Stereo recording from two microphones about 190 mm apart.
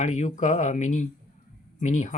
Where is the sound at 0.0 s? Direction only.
40° left (ahead or behind).